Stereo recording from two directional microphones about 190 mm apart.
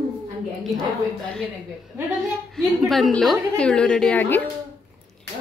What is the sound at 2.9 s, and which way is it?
A woman's voice, centre (ahead or behind).